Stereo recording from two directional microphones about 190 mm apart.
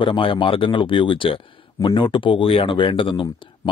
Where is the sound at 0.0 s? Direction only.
25° left (ahead or behind).